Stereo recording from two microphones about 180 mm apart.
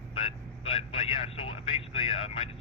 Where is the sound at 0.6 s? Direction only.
35° left (ahead or behind).